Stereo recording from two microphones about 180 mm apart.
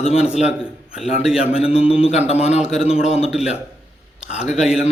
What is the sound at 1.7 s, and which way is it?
Speech, 35° left (ahead or behind).